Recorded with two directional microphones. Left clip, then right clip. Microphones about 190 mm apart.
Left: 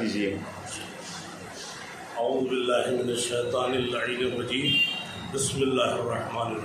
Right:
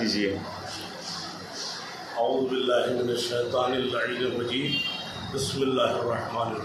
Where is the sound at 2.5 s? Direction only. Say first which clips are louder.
Right 1 dB; 15° left (ahead or behind).